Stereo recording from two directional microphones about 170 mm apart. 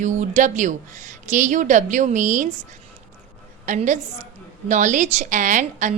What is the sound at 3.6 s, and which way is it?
A woman's voice, 45° right (ahead or behind).